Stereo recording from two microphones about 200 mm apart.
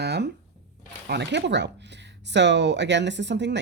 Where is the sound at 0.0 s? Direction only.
55° right (ahead or behind).